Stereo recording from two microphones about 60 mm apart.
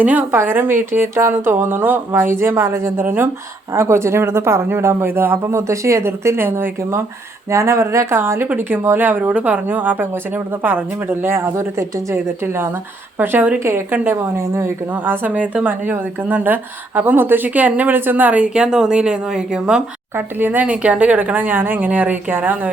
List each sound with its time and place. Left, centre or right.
0.0 s a woman's voice: right
0.3 s speech: right
7.5 s speech: right
8.1 s speech: right
13.1 s speech: right
14.3 s speech: right
15.0 s a woman's voice: right; by 19.8 s centre
20.1 s speech: right